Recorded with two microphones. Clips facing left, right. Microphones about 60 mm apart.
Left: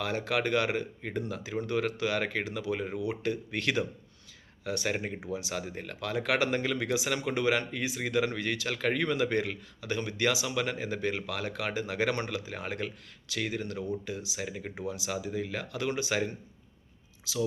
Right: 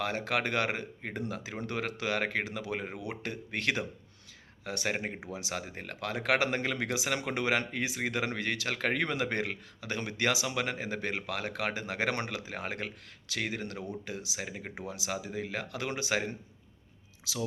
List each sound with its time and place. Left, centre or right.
0.0 s speech: right
0.7 s speech: right
1.6 s speech: right
5.3 s speech: right
5.5 s speech: right
12.1 s speech: right
14.4 s speech: right
14.8 s speech: right
15.1 s speech: right